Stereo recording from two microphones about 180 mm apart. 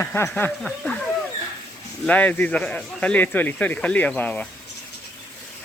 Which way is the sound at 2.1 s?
10° left (ahead or behind).